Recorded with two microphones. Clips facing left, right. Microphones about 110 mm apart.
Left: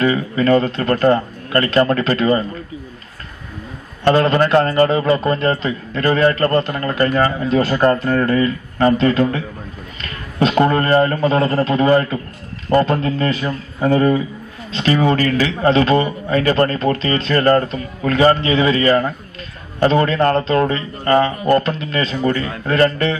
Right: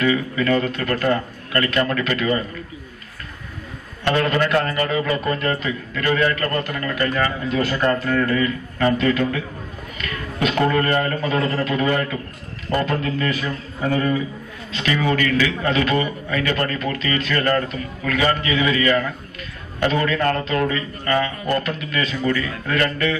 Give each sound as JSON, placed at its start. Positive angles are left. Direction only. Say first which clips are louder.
{"t": 0.0, "sound": "a man's voice", "louder": "left 4 dB", "side_deg": 35}
{"t": 4.0, "sound": "a man's voice", "louder": "left 6 dB", "side_deg": 35}